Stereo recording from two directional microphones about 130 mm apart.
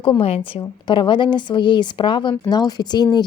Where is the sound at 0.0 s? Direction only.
45° left (ahead or behind).